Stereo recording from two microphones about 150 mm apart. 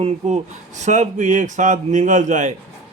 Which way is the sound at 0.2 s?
50° right (ahead or behind).